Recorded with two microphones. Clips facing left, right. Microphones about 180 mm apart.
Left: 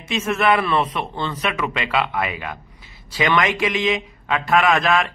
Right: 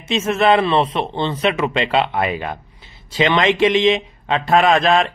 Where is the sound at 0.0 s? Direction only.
25° right (ahead or behind).